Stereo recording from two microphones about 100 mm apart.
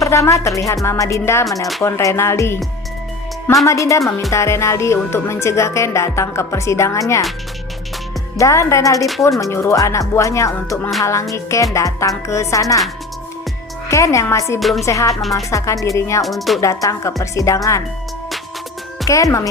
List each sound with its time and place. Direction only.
0.0 s speech: 30° left (ahead or behind)
3.7 s speech: 30° left (ahead or behind)
8.4 s speech: 30° left (ahead or behind)
13.8 s speech: 30° left (ahead or behind)
14.6 s speech: centre (ahead or behind)
14.8 s speech: 35° left (ahead or behind)
16.2 s speech: centre (ahead or behind)
16.6 s speech: 30° left (ahead or behind)
19.0 s speech: 35° left (ahead or behind)